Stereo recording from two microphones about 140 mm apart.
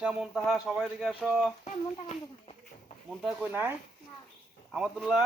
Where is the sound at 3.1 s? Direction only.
5° right (ahead or behind).